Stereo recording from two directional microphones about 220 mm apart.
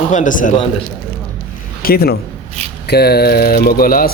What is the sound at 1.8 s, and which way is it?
A man's voice, 45° left (ahead or behind).